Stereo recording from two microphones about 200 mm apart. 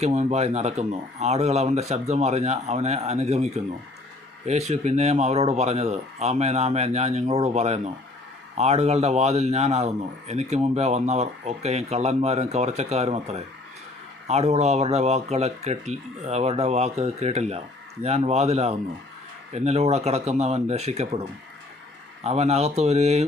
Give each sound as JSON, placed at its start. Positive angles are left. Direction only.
{"t": 0.0, "sound": "a man's voice", "side_deg": -35}
{"t": 22.2, "sound": "a man's voice", "side_deg": -35}